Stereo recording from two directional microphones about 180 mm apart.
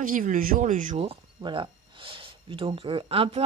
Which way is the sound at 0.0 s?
50° right (ahead or behind).